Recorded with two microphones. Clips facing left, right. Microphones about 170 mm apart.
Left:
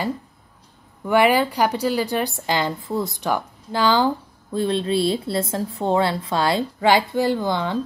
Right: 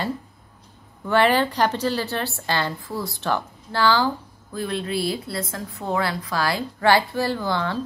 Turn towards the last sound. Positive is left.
turn(degrees=20)  # may be behind; listen again after turning